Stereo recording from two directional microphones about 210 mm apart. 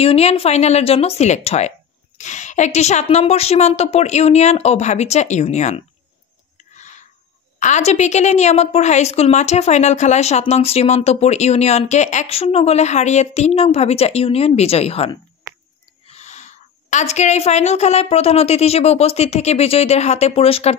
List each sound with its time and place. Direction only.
0.0 s a woman's voice: 30° left (ahead or behind)
7.6 s a woman's voice: 35° left (ahead or behind)
16.1 s a woman's voice: 35° left (ahead or behind)